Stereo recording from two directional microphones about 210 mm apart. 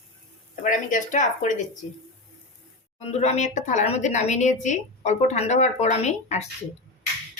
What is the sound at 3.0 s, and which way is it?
Speech, 30° left (ahead or behind).